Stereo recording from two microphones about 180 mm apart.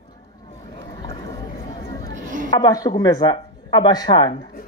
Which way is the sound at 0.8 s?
20° left (ahead or behind).